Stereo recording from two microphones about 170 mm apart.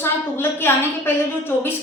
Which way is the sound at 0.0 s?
15° left (ahead or behind).